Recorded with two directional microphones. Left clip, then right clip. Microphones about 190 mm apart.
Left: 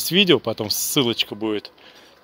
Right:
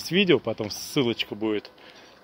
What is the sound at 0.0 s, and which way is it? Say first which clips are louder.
Speech: left 5 dB; 20° left (ahead or behind).